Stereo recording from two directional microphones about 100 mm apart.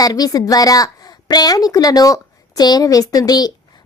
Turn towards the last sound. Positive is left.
turn(degrees=40)  # may be behind; listen again after turning